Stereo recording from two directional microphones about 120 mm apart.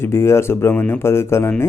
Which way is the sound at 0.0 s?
20° left (ahead or behind).